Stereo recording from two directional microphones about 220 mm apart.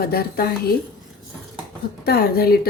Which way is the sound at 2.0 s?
45° left (ahead or behind).